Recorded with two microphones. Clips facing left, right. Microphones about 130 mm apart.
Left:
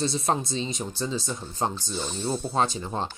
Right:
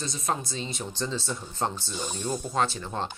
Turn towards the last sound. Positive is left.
turn(degrees=15)  # may be behind; listen again after turning